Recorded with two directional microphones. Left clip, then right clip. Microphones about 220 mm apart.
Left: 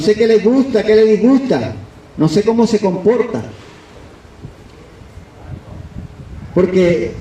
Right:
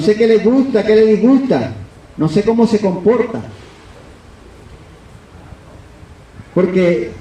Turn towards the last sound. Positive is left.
turn(degrees=45)  # may be behind; listen again after turning